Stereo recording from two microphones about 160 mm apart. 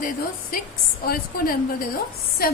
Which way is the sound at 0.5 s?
65° left (ahead or behind).